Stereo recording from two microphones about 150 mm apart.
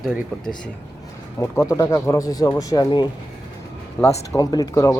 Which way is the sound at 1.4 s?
20° left (ahead or behind).